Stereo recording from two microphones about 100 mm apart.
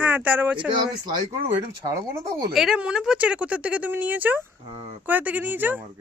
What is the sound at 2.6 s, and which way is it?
Speech, 5° right (ahead or behind).